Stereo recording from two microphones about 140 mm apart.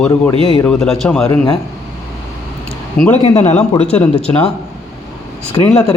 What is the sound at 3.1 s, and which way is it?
Speech, 50° left (ahead or behind).